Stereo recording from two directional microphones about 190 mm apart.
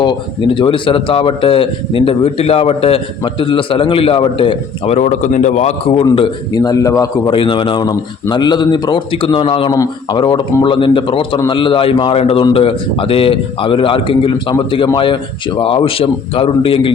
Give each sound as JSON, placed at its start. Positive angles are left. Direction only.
{"t": 0.0, "sound": "speech", "side_deg": 25}